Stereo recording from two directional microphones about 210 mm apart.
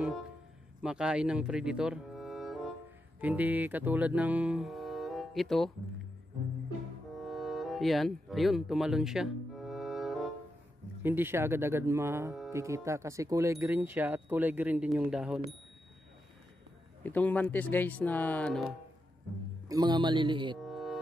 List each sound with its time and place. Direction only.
0.8 s speech: 5° right (ahead or behind)
7.2 s music: centre (ahead or behind)
11.0 s speech: 10° right (ahead or behind)
17.0 s speech: 10° left (ahead or behind)
19.7 s speech: 20° right (ahead or behind)
20.6 s music: centre (ahead or behind)